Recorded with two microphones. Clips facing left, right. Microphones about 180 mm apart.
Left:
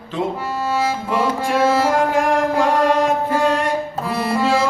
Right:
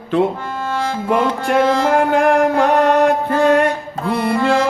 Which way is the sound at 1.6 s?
5° left (ahead or behind).